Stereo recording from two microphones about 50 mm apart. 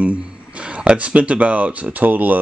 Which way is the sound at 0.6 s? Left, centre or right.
Right.